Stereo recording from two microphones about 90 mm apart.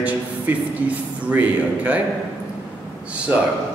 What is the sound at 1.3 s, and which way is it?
Speech, 15° right (ahead or behind).